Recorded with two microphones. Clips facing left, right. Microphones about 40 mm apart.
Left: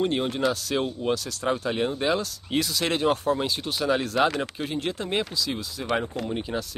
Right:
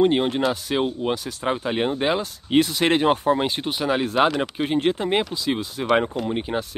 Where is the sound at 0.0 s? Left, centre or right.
Right.